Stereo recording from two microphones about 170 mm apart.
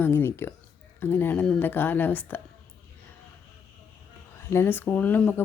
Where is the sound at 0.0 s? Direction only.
15° left (ahead or behind).